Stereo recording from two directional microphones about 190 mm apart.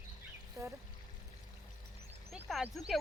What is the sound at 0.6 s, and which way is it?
Speech, 15° right (ahead or behind).